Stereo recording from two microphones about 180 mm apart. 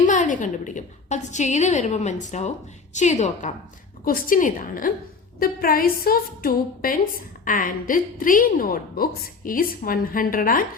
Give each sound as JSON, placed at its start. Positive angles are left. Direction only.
{"t": 0.0, "sound": "a woman's voice", "side_deg": 45}
{"t": 4.0, "sound": "a woman's voice", "side_deg": 50}